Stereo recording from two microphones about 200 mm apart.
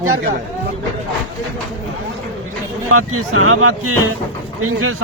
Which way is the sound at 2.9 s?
90° right.